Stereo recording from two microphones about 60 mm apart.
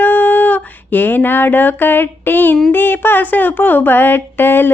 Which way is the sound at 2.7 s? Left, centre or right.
Left.